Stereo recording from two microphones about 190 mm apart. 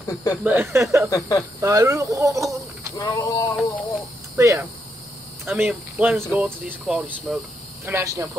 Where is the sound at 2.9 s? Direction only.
20° left (ahead or behind).